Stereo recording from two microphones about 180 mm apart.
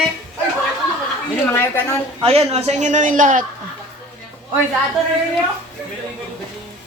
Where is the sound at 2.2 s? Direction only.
35° right (ahead or behind).